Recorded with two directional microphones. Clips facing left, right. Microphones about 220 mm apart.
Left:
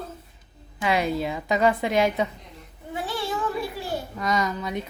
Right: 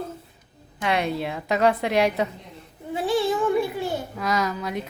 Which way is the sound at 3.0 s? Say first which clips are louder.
Right 7 dB; 25° right (ahead or behind).